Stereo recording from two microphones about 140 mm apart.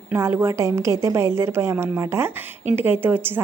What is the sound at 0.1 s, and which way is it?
A woman's voice, 20° right (ahead or behind).